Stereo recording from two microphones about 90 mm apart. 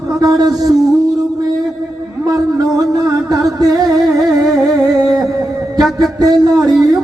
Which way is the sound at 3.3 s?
40° right (ahead or behind).